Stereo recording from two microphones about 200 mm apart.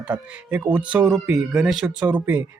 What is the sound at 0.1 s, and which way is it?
Speech, 10° right (ahead or behind).